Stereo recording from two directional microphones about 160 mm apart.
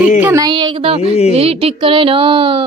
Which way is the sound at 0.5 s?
30° right (ahead or behind).